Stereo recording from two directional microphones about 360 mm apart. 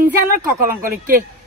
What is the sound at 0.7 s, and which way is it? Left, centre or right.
Speech, right.